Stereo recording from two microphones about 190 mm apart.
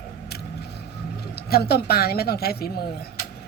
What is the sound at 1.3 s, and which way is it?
Speech, 55° left (ahead or behind).